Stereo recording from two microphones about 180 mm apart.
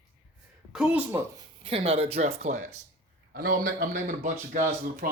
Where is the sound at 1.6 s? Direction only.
30° right (ahead or behind).